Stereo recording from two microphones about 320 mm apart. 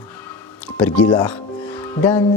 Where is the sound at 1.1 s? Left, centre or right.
Centre.